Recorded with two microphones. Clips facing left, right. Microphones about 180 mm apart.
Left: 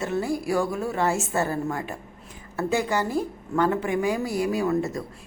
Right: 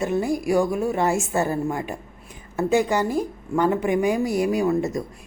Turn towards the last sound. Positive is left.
turn(degrees=-15)  # may be behind; listen again after turning